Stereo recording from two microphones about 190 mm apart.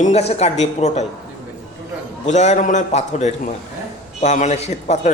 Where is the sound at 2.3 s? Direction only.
40° left (ahead or behind).